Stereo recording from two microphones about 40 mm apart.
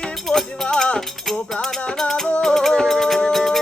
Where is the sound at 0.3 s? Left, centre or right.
Centre.